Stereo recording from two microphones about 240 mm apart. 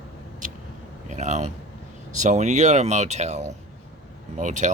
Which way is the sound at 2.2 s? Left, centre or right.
Right.